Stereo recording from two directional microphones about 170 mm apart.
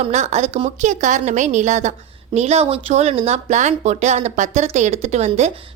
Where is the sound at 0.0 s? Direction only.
40° right (ahead or behind).